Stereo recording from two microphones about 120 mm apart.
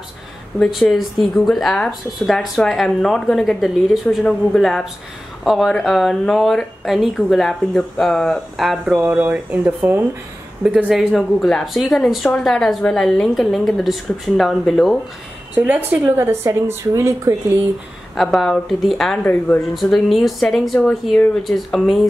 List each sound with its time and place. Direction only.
0.6 s speech: centre (ahead or behind)
10.9 s speech: 5° right (ahead or behind)
15.5 s speech: 15° right (ahead or behind)
18.1 s speech: centre (ahead or behind)
19.2 s speech: 15° left (ahead or behind)
19.7 s speech: centre (ahead or behind)